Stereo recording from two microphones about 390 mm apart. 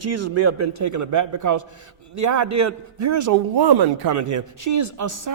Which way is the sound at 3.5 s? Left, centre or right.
Right.